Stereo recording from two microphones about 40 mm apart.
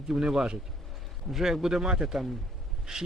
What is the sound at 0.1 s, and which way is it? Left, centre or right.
Speech, centre.